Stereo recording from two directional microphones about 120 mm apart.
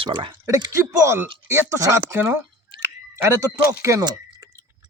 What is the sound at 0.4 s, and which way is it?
Speech, 25° right (ahead or behind).